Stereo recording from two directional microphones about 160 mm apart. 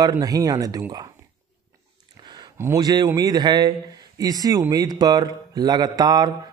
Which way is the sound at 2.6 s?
25° right (ahead or behind).